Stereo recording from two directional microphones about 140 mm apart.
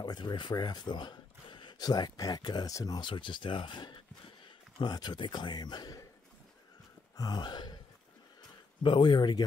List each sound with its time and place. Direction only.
0.0 s a man's voice: 30° left (ahead or behind)
7.2 s a man's voice: 30° left (ahead or behind)
8.8 s a man's voice: 35° left (ahead or behind)